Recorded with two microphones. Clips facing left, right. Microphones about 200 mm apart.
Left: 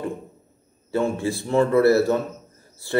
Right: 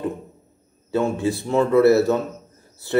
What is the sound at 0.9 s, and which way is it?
A man's voice, 20° right (ahead or behind).